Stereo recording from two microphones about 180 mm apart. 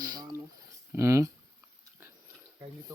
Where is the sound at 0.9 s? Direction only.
15° right (ahead or behind).